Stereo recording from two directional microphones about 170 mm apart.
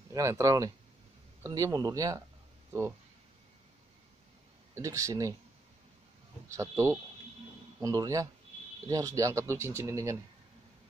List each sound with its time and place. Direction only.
0.1 s speech: 15° right (ahead or behind)
4.7 s speech: 20° right (ahead or behind)
6.5 s speech: 15° right (ahead or behind)